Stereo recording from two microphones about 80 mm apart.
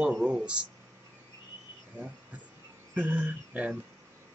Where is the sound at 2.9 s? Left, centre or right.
Right.